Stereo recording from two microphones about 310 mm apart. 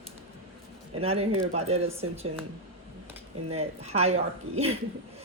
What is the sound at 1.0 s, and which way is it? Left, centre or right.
Speech, centre.